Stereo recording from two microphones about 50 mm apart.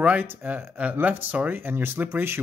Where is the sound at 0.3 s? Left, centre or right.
Right.